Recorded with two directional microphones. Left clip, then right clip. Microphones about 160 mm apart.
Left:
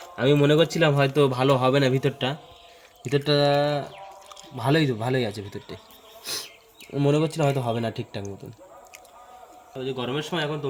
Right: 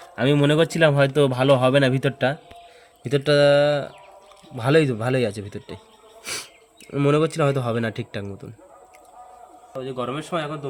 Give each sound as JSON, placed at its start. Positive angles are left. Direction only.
{"t": 0.2, "sound": "a man's voice", "side_deg": -90}
{"t": 6.9, "sound": "speech", "side_deg": -60}
{"t": 9.8, "sound": "a man's voice", "side_deg": -35}